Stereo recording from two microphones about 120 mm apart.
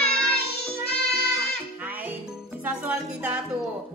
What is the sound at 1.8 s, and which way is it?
Music, 15° right (ahead or behind).